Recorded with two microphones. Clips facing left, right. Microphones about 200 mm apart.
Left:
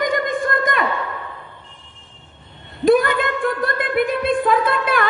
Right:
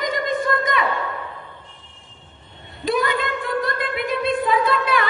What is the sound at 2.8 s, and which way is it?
A woman's voice, 55° left (ahead or behind).